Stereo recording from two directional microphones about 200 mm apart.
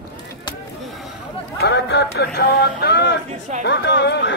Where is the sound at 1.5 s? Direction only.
55° left (ahead or behind).